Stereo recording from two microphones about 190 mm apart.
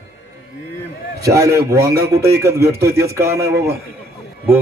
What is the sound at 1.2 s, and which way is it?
Speech, 15° right (ahead or behind).